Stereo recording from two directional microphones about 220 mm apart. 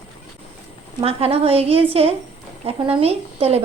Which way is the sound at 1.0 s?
25° right (ahead or behind).